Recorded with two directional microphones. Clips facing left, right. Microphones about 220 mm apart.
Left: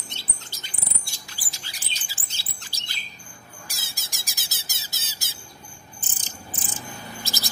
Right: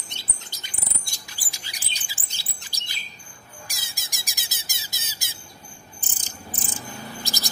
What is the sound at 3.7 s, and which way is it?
Squawk, 15° right (ahead or behind).